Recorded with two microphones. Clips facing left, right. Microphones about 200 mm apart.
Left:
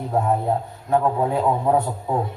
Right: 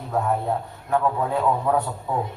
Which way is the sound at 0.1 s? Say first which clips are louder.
Left 2 dB; 25° left (ahead or behind).